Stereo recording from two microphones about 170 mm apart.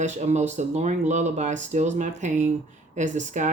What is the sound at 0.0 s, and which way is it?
Speech, 45° right (ahead or behind).